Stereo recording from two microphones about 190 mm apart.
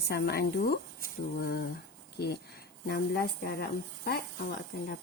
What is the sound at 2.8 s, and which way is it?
Speech, 55° left (ahead or behind).